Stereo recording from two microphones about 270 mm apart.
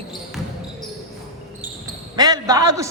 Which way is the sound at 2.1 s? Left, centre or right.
Centre.